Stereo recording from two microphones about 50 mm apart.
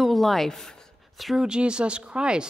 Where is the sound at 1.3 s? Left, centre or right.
Centre.